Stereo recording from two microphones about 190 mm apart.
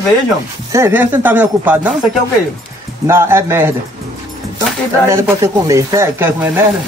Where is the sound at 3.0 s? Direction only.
15° right (ahead or behind).